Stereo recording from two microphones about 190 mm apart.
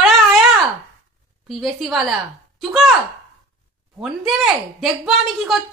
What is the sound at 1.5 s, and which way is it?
Speech, centre (ahead or behind).